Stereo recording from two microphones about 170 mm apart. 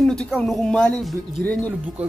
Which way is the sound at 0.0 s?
5° left (ahead or behind).